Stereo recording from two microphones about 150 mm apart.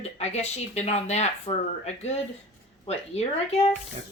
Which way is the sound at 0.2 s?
45° left (ahead or behind).